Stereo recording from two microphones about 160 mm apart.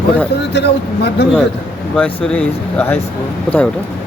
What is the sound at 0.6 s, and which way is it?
Speech, 90° left.